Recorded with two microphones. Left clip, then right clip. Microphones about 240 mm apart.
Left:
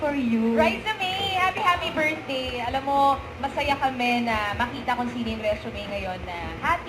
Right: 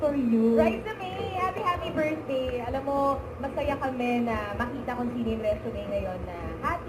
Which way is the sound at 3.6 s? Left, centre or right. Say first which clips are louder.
Left 5 dB; centre.